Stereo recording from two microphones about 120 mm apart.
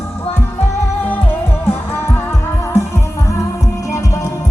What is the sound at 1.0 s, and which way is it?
Music, 15° left (ahead or behind).